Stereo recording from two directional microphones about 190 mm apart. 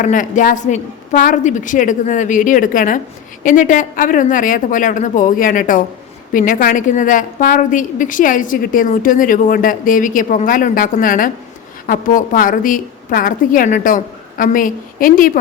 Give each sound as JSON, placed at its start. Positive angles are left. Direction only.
{"t": 0.0, "sound": "a woman's voice", "side_deg": 40}